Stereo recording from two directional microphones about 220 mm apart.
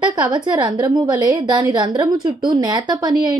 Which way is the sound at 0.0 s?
20° right (ahead or behind).